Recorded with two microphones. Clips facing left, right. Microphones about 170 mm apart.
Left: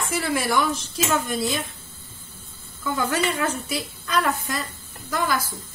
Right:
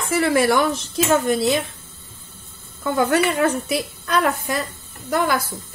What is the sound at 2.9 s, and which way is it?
A woman's voice, 60° right (ahead or behind).